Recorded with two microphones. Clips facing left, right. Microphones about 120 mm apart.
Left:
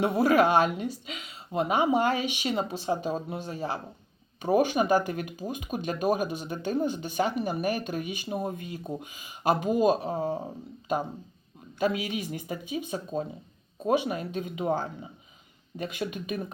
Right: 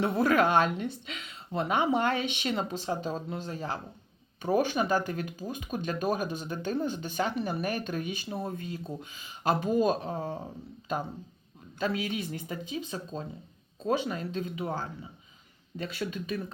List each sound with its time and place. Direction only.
0.0 s speech: 15° left (ahead or behind)